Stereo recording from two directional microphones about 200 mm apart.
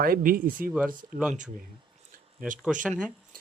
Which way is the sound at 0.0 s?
45° right (ahead or behind).